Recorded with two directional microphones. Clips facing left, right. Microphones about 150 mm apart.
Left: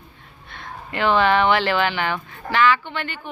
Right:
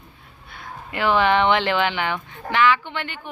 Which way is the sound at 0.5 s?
5° right (ahead or behind).